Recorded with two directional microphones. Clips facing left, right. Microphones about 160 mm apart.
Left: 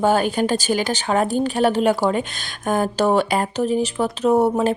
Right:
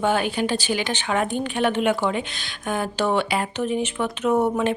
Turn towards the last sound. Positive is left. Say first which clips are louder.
# left 4 dB
turn(degrees=35)  # may be behind; listen again after turning